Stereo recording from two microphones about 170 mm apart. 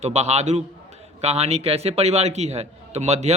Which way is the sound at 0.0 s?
40° right (ahead or behind).